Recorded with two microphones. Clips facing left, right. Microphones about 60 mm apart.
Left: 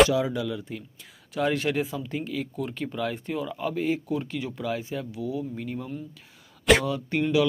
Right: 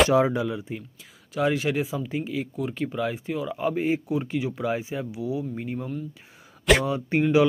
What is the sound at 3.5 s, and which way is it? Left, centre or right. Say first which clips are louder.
A man's voice: right 3 dB; centre.